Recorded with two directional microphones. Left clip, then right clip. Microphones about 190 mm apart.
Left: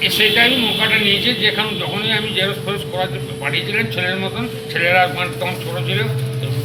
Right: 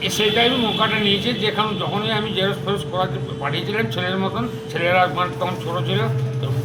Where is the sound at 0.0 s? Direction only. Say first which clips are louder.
Left 4 dB; 15° right (ahead or behind).